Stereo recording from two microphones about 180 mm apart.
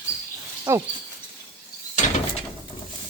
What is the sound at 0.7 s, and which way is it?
Speech, 15° right (ahead or behind).